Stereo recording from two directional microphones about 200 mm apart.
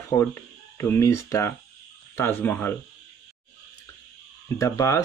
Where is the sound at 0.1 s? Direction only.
15° left (ahead or behind).